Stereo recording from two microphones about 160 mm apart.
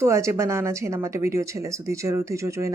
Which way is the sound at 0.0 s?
20° right (ahead or behind).